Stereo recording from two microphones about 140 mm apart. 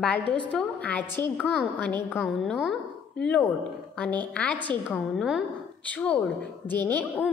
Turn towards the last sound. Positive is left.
turn(degrees=10)  # may be behind; listen again after turning